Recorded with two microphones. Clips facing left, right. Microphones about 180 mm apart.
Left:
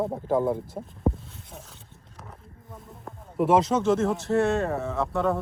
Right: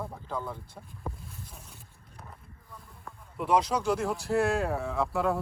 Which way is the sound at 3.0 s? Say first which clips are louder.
Left 11 dB; 40° left (ahead or behind).